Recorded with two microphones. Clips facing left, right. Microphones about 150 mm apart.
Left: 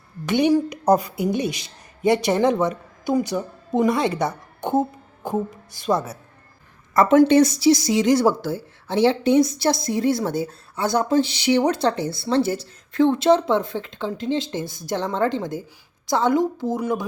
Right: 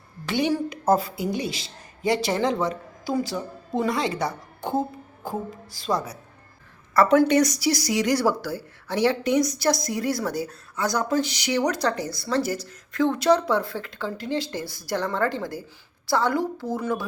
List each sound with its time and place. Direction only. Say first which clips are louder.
0.3 s speech: left 6 dB; 20° left (ahead or behind)